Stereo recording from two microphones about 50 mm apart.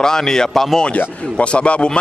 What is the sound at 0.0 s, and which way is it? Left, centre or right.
Speech, centre.